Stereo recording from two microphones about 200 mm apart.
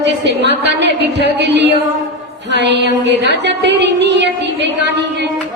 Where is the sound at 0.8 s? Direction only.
60° right (ahead or behind).